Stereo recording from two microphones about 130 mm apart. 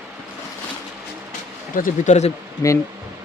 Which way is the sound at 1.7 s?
80° left.